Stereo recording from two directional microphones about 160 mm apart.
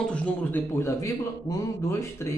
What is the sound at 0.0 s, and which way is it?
A man's voice, 5° left (ahead or behind).